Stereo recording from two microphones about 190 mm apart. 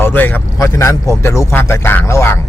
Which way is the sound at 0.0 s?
10° left (ahead or behind).